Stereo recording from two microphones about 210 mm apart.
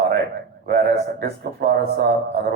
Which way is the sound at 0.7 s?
45° right (ahead or behind).